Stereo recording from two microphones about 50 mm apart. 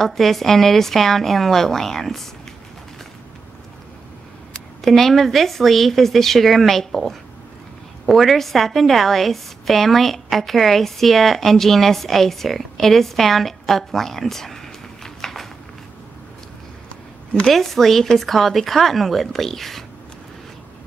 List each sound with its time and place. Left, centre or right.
0.0 s a woman's voice: centre
4.8 s a woman's voice: centre
15.0 s a sound: centre
17.3 s speech: centre
17.6 s a woman's voice: centre